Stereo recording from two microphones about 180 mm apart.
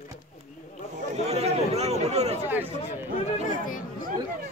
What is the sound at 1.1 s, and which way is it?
Chatter, 35° right (ahead or behind).